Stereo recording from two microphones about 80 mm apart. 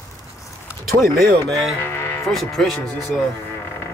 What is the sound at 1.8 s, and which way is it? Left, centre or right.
Music, left.